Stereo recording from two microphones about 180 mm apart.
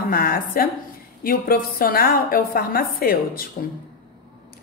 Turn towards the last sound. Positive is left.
turn(degrees=55)  # may be behind; listen again after turning